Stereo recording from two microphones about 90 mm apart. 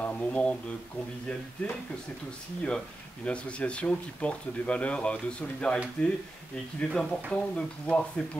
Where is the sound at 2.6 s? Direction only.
10° left (ahead or behind).